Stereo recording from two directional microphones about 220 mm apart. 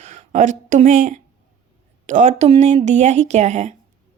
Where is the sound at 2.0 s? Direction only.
30° right (ahead or behind).